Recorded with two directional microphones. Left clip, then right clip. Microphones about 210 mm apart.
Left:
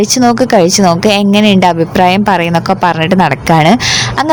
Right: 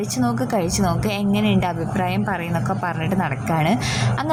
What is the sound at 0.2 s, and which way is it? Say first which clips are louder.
A woman's voice: left 13 dB; 40° left (ahead or behind).